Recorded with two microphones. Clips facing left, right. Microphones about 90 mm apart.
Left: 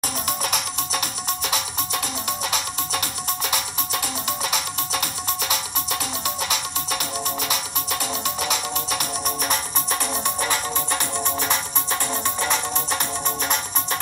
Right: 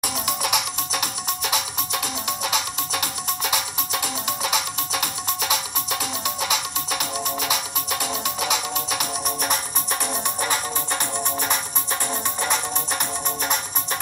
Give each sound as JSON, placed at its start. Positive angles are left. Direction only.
{"t": 0.9, "sound": "music", "side_deg": -15}